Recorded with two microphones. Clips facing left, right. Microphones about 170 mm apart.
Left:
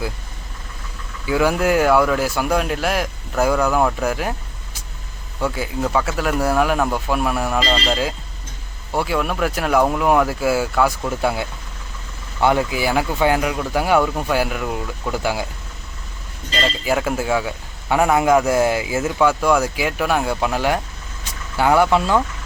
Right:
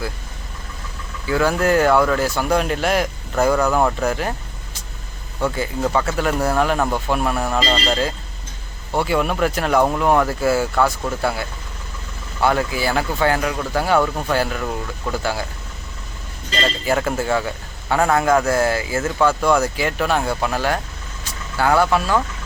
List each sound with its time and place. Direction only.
1.3 s speech: 10° left (ahead or behind)
5.4 s a man's voice: 5° left (ahead or behind)
16.6 s a man's voice: 10° left (ahead or behind)